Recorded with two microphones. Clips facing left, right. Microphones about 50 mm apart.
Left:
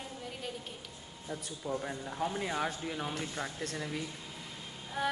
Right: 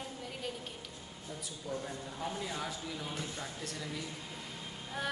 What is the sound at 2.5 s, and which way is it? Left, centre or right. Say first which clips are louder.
Speech: left 5 dB; left.